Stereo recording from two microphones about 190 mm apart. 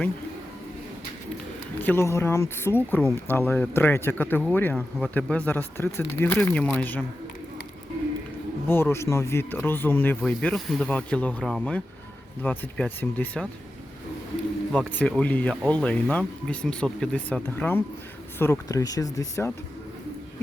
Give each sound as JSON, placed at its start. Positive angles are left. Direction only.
{"t": 1.8, "sound": "speech", "side_deg": 10}
{"t": 8.6, "sound": "speech", "side_deg": 10}
{"t": 14.7, "sound": "speech", "side_deg": 0}